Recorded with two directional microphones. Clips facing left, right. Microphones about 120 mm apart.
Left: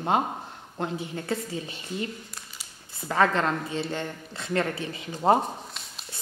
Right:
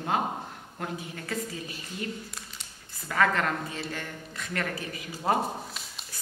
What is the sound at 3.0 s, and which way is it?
Speech, 30° left (ahead or behind).